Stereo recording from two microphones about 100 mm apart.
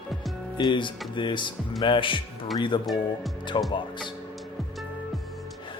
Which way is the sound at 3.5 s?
60° left (ahead or behind).